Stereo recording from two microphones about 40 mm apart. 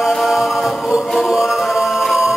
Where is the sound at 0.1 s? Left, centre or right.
Centre.